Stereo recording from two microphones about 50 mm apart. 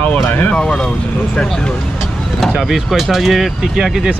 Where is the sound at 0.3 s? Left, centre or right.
Left.